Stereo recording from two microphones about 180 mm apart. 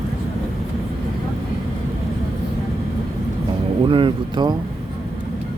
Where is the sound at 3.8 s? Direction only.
30° right (ahead or behind).